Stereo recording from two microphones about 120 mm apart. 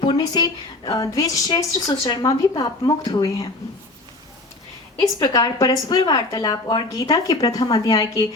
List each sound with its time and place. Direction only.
0.0 s a woman's voice: 40° left (ahead or behind)
5.2 s a woman's voice: 30° left (ahead or behind)